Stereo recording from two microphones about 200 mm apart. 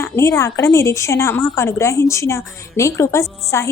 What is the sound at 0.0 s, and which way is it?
A woman's voice, 15° left (ahead or behind).